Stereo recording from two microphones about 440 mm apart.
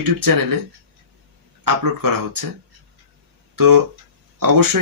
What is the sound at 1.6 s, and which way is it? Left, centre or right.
Speech, right.